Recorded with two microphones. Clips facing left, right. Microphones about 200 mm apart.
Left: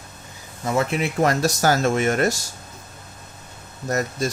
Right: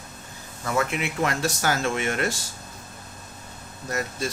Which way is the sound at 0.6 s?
20° left (ahead or behind).